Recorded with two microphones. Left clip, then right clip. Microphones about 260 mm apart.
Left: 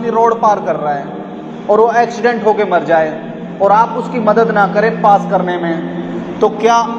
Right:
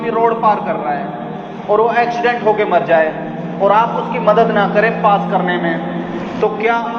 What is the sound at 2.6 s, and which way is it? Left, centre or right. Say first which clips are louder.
Speech: left 1 dB; left.